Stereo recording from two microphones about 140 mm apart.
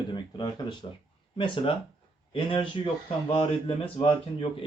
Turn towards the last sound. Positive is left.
turn(degrees=40)  # may be behind; listen again after turning